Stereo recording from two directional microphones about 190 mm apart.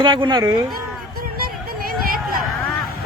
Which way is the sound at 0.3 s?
20° right (ahead or behind).